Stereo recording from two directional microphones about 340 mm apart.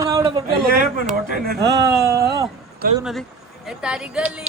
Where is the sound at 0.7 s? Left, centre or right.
Right.